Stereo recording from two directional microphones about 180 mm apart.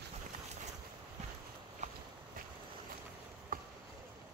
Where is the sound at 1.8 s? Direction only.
40° right (ahead or behind).